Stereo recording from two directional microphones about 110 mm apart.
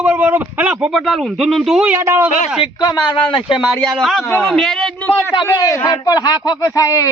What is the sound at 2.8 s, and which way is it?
Speech, 45° left (ahead or behind).